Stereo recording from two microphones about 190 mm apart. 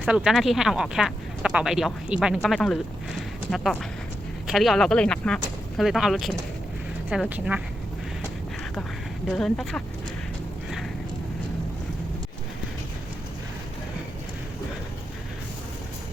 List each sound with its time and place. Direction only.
0.0 s speech: 5° right (ahead or behind)
9.3 s speech: 5° left (ahead or behind)